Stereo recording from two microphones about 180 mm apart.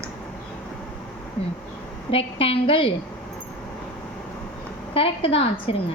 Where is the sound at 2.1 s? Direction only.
30° left (ahead or behind).